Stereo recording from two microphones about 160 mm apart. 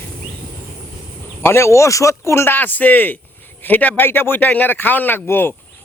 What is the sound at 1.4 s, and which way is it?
Speech, 15° left (ahead or behind).